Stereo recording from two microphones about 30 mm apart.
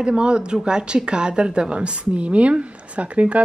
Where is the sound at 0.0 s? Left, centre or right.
Right.